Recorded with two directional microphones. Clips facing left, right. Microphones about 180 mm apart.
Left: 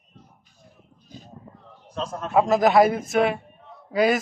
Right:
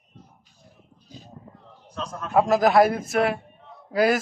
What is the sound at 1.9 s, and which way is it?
Speech, 25° left (ahead or behind).